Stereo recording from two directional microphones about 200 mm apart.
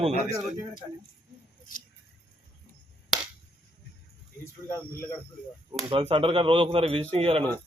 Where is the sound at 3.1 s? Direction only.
Centre (ahead or behind).